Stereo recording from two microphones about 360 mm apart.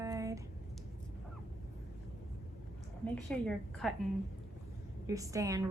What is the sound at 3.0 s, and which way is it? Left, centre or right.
Speech, centre.